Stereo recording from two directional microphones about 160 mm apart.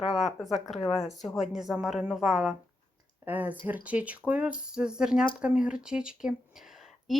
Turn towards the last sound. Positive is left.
turn(degrees=0)  # may be behind; listen again after turning